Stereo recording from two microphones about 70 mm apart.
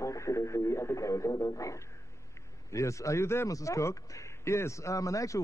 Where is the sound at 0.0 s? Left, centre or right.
Left.